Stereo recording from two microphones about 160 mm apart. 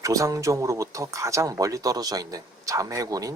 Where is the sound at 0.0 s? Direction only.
20° right (ahead or behind).